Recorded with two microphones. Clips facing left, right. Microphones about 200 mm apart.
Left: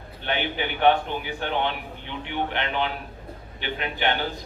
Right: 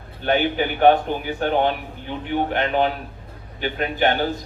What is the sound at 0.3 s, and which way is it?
Speech, 45° right (ahead or behind).